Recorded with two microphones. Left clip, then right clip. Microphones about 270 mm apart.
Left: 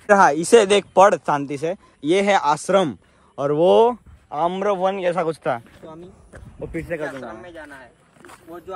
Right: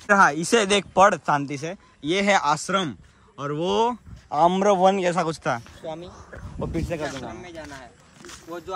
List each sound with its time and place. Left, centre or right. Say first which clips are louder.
0.0 s speech: left 3 dB; centre
4.3 s a man's voice: right 2 dB; centre
6.7 s a man's voice: left 2 dB; centre
7.0 s speech: left 2 dB; centre